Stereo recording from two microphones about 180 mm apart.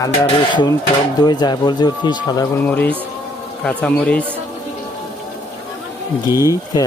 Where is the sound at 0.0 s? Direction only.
25° left (ahead or behind).